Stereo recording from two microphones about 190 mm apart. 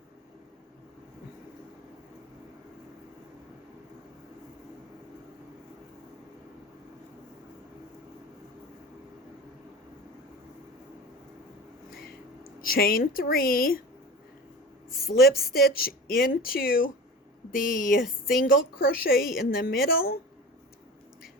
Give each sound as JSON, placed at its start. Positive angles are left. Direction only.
{"t": 12.6, "sound": "speech", "side_deg": 50}
{"t": 14.9, "sound": "speech", "side_deg": 55}
{"t": 18.0, "sound": "speech", "side_deg": 0}
{"t": 18.4, "sound": "speech", "side_deg": 50}